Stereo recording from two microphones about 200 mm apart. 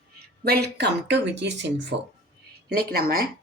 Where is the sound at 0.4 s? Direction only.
55° right (ahead or behind).